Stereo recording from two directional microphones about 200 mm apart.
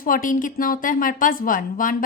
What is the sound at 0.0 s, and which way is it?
Speech, 45° left (ahead or behind).